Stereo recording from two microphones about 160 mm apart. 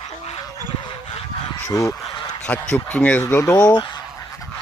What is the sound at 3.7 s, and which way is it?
Speech, 25° left (ahead or behind).